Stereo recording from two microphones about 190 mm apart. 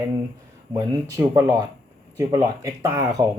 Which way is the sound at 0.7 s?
20° right (ahead or behind).